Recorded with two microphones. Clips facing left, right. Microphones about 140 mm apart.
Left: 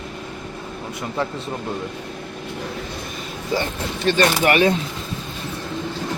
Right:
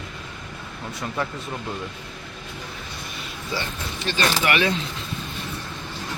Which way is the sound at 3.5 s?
50° left (ahead or behind).